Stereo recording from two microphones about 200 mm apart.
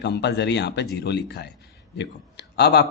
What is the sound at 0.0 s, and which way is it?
Speech, 55° left (ahead or behind).